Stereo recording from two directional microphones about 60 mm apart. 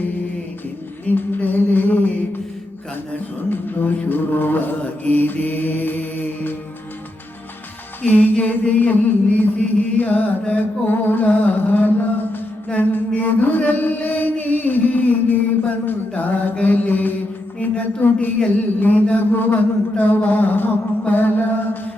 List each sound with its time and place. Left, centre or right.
1.0 s a sound: left
3.5 s mantra: left
8.0 s music: left
13.1 s chant: left
17.6 s a sound: left
18.8 s mantra: left